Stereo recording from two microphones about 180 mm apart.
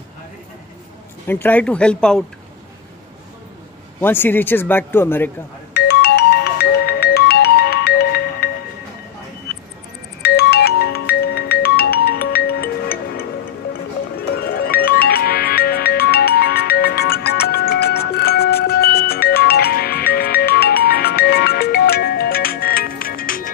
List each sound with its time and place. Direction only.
1.2 s speech: 10° left (ahead or behind)
4.0 s speech: 10° left (ahead or behind)
5.7 s music: 65° left (ahead or behind)
10.2 s music: 60° left (ahead or behind)
14.4 s music: 60° left (ahead or behind)